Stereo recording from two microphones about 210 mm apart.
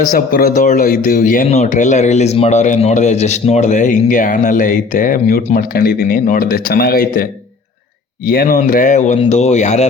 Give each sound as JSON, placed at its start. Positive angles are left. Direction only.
{"t": 0.0, "sound": "speech", "side_deg": 40}
{"t": 8.3, "sound": "speech", "side_deg": 45}